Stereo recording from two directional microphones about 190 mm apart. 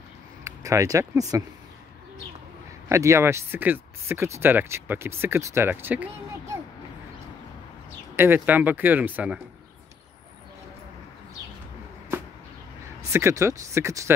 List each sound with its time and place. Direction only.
0.4 s speech: 15° right (ahead or behind)
2.9 s speech: 15° right (ahead or behind)
8.2 s speech: 10° right (ahead or behind)
13.1 s speech: 15° right (ahead or behind)